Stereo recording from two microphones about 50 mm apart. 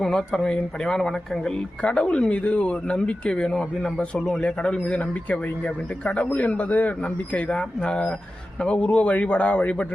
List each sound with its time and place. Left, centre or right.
0.0 s a man's voice: centre